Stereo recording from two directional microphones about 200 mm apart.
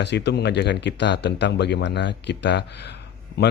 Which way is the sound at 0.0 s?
60° left (ahead or behind).